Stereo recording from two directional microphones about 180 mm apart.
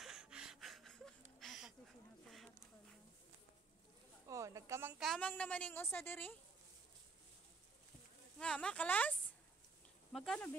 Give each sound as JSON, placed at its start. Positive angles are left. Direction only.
{"t": 0.0, "sound": "a sound", "side_deg": 0}
{"t": 4.3, "sound": "a woman's voice", "side_deg": -15}
{"t": 8.4, "sound": "a woman's voice", "side_deg": 5}
{"t": 10.1, "sound": "speech", "side_deg": 0}